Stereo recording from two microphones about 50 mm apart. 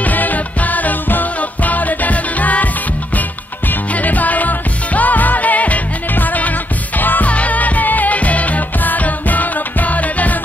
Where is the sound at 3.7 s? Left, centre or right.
Left.